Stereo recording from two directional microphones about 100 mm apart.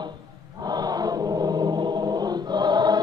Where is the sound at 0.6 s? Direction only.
40° right (ahead or behind).